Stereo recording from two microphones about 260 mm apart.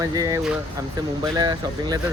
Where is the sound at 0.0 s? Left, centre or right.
Centre.